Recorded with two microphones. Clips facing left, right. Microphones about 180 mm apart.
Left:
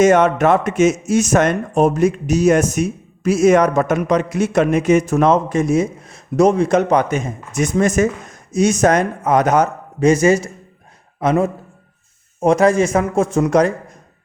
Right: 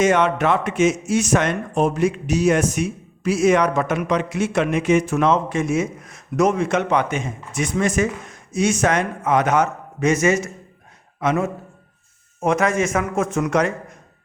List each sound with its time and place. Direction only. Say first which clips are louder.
0.0 s speech: left 5 dB; 45° left (ahead or behind)